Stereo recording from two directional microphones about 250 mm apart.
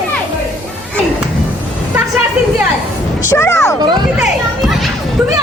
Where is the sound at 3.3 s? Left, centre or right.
Centre.